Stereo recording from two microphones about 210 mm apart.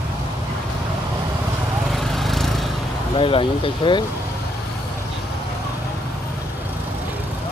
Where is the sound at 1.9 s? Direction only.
Centre (ahead or behind).